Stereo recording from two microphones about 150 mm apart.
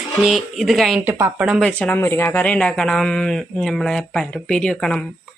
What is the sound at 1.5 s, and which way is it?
A woman's voice, 5° left (ahead or behind).